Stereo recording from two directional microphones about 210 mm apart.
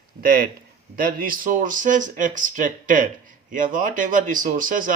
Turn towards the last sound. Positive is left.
turn(degrees=-40)  # may be behind; listen again after turning